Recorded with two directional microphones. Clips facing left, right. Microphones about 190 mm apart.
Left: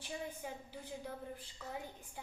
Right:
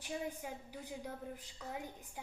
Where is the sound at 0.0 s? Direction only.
15° right (ahead or behind).